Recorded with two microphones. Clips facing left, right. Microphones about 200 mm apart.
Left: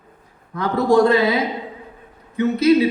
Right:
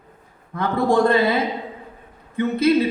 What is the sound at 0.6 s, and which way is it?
Speech, 55° right (ahead or behind).